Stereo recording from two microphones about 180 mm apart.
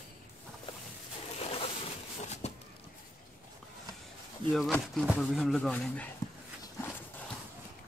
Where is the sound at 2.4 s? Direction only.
35° left (ahead or behind).